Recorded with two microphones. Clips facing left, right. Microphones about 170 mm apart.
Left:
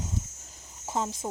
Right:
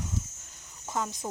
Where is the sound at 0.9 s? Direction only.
25° left (ahead or behind).